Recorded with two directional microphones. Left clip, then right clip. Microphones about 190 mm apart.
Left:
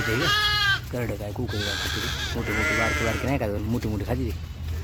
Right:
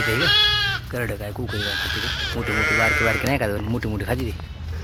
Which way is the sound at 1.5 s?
55° left (ahead or behind).